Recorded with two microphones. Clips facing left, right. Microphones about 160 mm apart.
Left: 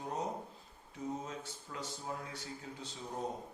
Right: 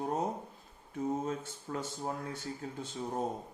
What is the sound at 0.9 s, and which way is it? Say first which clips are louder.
Speech: right 7 dB; 50° right (ahead or behind).